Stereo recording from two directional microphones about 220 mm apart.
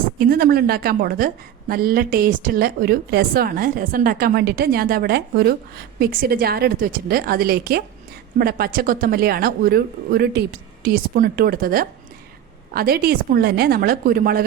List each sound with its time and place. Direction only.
0.2 s a woman's voice: 40° right (ahead or behind)